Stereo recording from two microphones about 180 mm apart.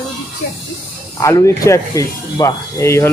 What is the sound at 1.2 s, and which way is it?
Speech, 15° left (ahead or behind).